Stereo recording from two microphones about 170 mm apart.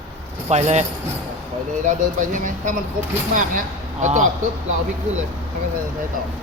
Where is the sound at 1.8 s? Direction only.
50° right (ahead or behind).